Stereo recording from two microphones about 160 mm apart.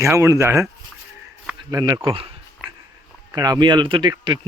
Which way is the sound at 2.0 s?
35° right (ahead or behind).